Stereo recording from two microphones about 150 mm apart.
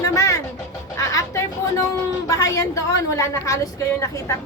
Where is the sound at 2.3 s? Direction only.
20° left (ahead or behind).